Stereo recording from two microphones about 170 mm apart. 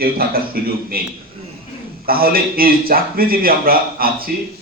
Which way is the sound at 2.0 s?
60° right (ahead or behind).